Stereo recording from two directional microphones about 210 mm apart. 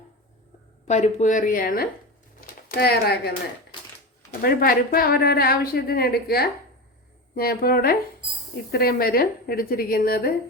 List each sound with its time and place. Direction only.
0.9 s speech: 35° left (ahead or behind)